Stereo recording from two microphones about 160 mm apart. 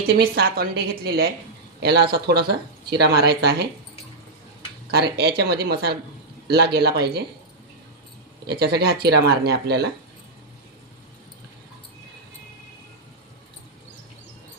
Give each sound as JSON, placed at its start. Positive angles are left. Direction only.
{"t": 0.0, "sound": "a woman's voice", "side_deg": -70}
{"t": 1.8, "sound": "speech", "side_deg": -90}
{"t": 4.9, "sound": "speech", "side_deg": -85}
{"t": 6.7, "sound": "speech", "side_deg": -90}
{"t": 8.4, "sound": "speech", "side_deg": -85}